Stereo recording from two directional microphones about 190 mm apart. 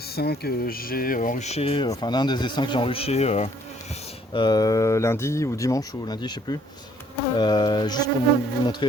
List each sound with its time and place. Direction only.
0.1 s speech: 55° left (ahead or behind); by 3.5 s 35° left (ahead or behind)
4.4 s speech: 20° left (ahead or behind)